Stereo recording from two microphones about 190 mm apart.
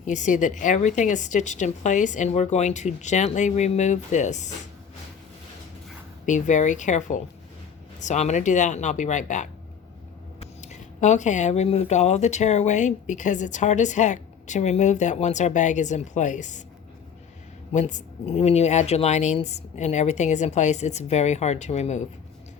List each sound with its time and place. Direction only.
0.0 s speech: 40° left (ahead or behind)
6.2 s speech: 40° left (ahead or behind)
17.7 s speech: 40° left (ahead or behind)